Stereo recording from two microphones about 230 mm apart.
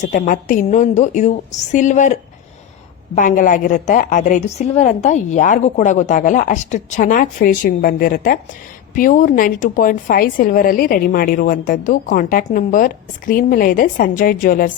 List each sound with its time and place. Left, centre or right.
0.0 s a woman's voice: left
3.2 s a woman's voice: left